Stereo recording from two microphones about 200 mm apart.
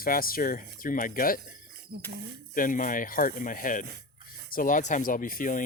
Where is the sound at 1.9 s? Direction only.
55° right (ahead or behind).